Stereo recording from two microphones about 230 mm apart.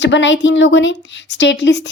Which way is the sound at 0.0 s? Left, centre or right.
Left.